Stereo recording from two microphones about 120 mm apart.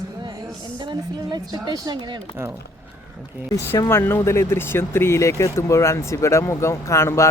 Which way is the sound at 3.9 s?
20° left (ahead or behind).